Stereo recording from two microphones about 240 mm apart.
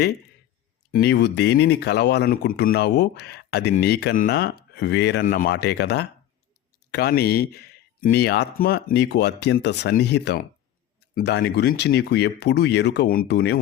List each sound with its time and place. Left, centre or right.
0.9 s speech: left